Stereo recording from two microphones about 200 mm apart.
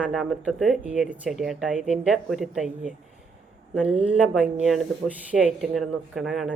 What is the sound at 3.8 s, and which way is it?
Speech, 30° right (ahead or behind).